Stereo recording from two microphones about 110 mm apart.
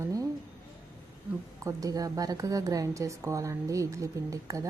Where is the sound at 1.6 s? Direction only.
30° right (ahead or behind).